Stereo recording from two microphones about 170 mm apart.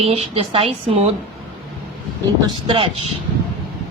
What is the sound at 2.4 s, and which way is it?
Speech, 30° right (ahead or behind).